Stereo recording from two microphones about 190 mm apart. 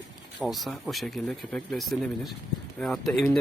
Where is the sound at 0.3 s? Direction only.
Centre (ahead or behind).